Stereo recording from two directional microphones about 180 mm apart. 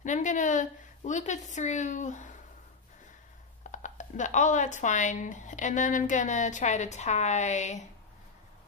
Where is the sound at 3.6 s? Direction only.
45° left (ahead or behind).